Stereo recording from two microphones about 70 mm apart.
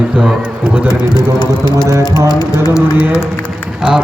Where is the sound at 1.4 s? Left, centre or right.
Left.